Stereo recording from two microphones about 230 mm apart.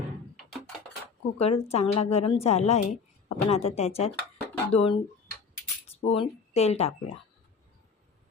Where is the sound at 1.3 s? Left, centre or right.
Left.